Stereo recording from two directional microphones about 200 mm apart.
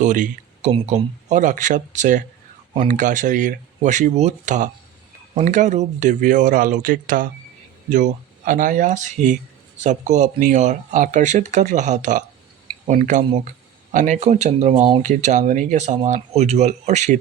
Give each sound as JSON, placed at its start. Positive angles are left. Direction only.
{"t": 0.0, "sound": "speech", "side_deg": -40}